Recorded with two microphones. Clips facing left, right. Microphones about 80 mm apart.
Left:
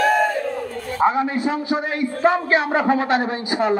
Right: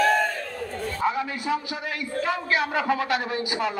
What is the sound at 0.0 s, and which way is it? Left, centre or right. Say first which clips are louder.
Crowd: left 4 dB; centre.